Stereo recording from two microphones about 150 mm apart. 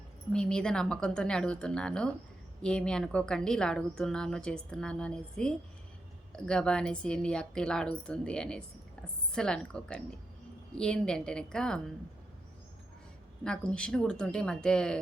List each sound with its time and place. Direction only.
0.3 s a woman's voice: 5° left (ahead or behind)
13.4 s a woman's voice: 5° left (ahead or behind)